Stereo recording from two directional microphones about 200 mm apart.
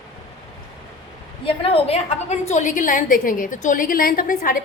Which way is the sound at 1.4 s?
25° left (ahead or behind).